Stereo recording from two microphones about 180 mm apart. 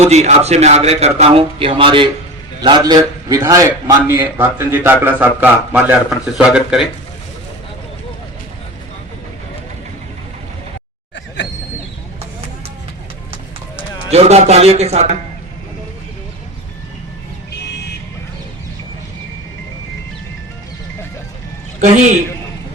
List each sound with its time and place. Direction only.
0.0 s a man's voice: 40° right (ahead or behind); by 6.8 s 5° right (ahead or behind)
14.1 s a man's voice: 35° right (ahead or behind)
21.8 s a man's voice: 40° right (ahead or behind)